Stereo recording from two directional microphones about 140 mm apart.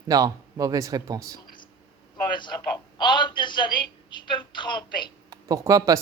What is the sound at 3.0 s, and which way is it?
A man's voice, 35° left (ahead or behind).